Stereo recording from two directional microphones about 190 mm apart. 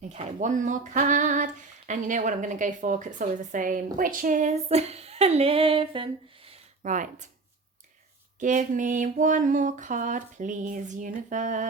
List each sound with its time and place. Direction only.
0.1 s female singing: 40° right (ahead or behind)
6.8 s female singing: 40° right (ahead or behind)
8.4 s female singing: 40° right (ahead or behind)